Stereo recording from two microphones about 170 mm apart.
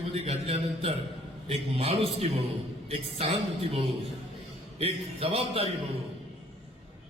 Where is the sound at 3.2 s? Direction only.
35° right (ahead or behind).